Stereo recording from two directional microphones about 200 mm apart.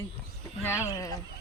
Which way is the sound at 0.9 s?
15° left (ahead or behind).